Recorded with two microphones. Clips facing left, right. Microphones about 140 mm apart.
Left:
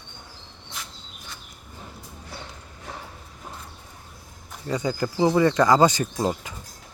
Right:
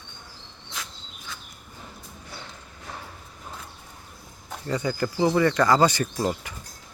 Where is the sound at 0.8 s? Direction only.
90° right.